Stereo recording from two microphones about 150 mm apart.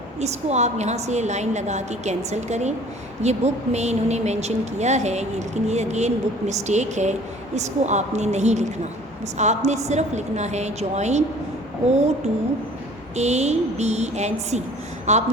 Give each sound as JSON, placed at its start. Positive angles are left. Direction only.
{"t": 0.2, "sound": "speech", "side_deg": -50}
{"t": 12.2, "sound": "speech", "side_deg": -45}